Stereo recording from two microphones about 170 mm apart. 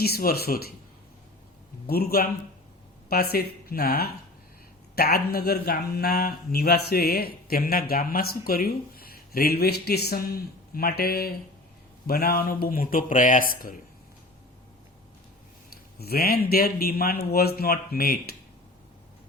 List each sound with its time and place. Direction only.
0.0 s speech: 65° left (ahead or behind)
1.9 s speech: 65° left (ahead or behind)
16.0 s speech: 65° left (ahead or behind)